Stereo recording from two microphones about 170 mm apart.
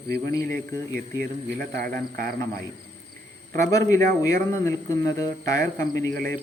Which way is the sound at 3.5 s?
15° left (ahead or behind).